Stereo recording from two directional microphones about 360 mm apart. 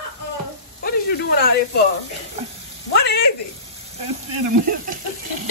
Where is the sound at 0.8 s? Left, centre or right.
Left.